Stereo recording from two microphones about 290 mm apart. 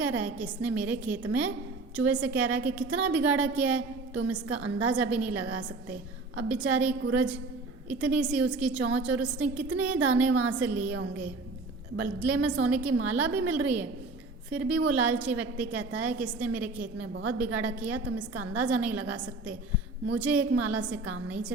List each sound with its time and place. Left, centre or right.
0.0 s a woman's voice: centre
11.9 s a woman's voice: centre